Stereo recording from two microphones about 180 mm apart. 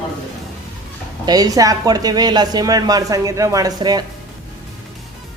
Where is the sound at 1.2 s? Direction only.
20° right (ahead or behind).